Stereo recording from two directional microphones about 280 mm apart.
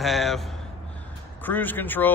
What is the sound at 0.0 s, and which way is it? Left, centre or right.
Speech, centre.